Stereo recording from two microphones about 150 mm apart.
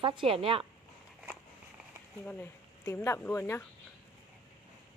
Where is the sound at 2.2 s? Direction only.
15° left (ahead or behind).